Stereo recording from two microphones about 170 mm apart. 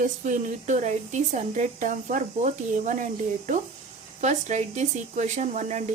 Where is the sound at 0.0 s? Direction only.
50° right (ahead or behind).